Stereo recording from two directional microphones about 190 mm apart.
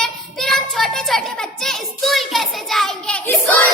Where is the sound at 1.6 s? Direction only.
Centre (ahead or behind).